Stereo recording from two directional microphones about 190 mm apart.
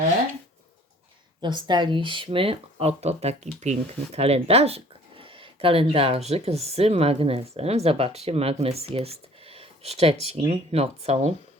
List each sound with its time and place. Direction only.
1.4 s speech: 25° right (ahead or behind)